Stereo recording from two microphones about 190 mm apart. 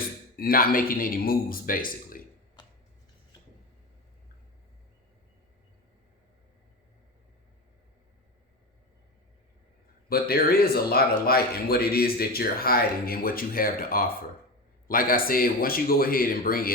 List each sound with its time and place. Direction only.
0.3 s a man's voice: 50° left (ahead or behind)
10.1 s a man's voice: 55° left (ahead or behind)